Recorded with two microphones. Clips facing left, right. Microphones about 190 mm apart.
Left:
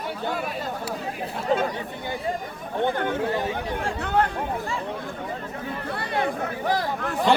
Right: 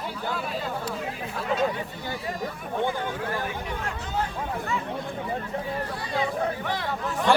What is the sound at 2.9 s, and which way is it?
Speech, 60° left (ahead or behind).